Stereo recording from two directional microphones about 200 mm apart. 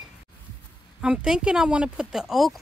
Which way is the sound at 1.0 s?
5° right (ahead or behind).